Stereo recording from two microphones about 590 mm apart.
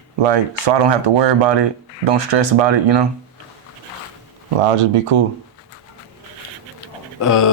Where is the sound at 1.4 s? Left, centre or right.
Right.